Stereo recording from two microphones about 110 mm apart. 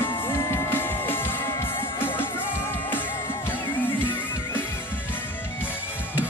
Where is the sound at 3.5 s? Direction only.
20° left (ahead or behind).